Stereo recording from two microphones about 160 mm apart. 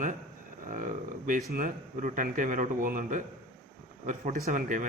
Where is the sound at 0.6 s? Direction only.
55° right (ahead or behind).